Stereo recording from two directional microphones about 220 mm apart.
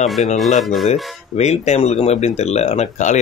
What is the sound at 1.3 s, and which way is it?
Speech, 30° left (ahead or behind).